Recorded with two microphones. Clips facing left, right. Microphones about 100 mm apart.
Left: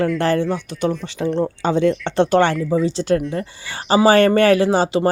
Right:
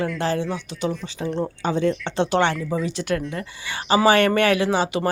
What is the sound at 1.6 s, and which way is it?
Speech, 80° left.